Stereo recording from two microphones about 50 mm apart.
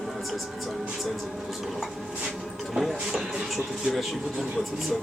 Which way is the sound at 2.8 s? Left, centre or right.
Centre.